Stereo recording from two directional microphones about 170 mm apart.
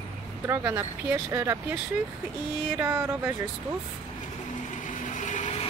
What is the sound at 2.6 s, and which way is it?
Speech, 10° right (ahead or behind).